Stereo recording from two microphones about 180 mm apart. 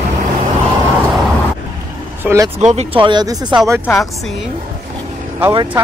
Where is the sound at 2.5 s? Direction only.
35° right (ahead or behind); by 3.5 s 20° right (ahead or behind).